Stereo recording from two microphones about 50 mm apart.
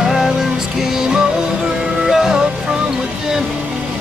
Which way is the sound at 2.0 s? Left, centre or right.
Centre.